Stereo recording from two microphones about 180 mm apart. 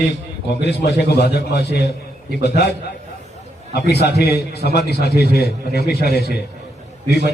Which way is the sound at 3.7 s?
65° left (ahead or behind).